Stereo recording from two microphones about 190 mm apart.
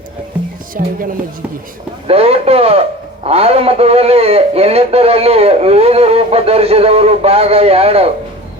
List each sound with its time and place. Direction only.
0.7 s speech: 45° right (ahead or behind)
2.0 s a man's voice: 30° right (ahead or behind)